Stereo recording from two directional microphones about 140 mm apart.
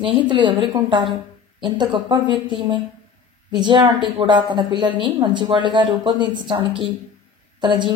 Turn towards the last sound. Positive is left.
turn(degrees=-35)  # may be behind; listen again after turning